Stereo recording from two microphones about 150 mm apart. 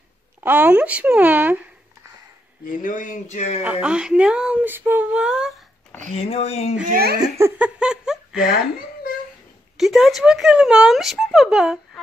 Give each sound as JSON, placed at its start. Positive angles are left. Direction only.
{"t": 0.4, "sound": "speech", "side_deg": -10}
{"t": 2.8, "sound": "speech", "side_deg": 60}
{"t": 3.8, "sound": "speech", "side_deg": -5}
{"t": 6.1, "sound": "speech", "side_deg": 40}
{"t": 6.9, "sound": "speech", "side_deg": -90}
{"t": 7.2, "sound": "speech", "side_deg": -15}
{"t": 9.8, "sound": "speech", "side_deg": 0}